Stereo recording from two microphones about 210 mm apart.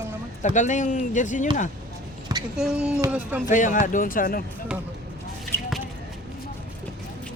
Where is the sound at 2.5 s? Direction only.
5° right (ahead or behind).